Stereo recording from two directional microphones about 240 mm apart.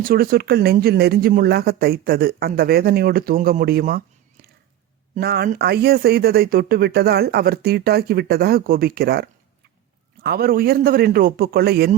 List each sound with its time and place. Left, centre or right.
0.1 s speech: right
5.1 s speech: right